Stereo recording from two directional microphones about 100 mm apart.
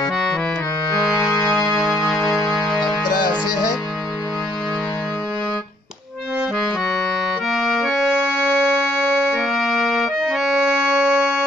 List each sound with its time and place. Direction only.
2.3 s music: 5° left (ahead or behind)
3.2 s music: 45° left (ahead or behind)
7.4 s music: centre (ahead or behind)